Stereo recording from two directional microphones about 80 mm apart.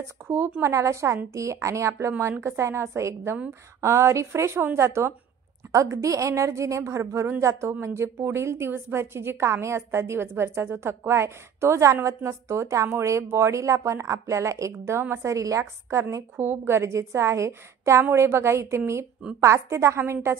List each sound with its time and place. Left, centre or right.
0.0 s speech: right
0.6 s a woman's voice: right